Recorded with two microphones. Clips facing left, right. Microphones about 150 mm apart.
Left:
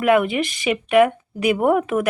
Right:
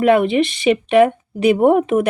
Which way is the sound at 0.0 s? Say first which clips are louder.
Right 4 dB; 30° right (ahead or behind).